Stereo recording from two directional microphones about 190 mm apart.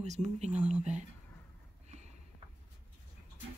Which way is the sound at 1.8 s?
35° right (ahead or behind).